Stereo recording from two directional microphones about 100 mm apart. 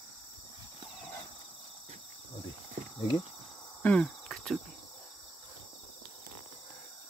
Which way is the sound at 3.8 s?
10° left (ahead or behind).